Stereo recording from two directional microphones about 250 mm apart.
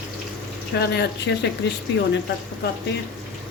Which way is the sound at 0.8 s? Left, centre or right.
Left.